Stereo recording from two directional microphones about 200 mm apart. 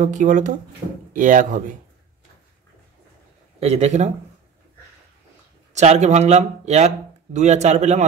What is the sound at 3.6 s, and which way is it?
Speech, 35° right (ahead or behind).